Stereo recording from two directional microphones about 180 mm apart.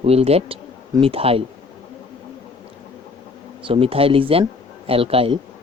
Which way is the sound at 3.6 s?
30° right (ahead or behind).